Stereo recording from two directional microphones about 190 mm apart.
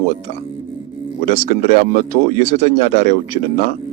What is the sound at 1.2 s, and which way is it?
Speech, 45° left (ahead or behind).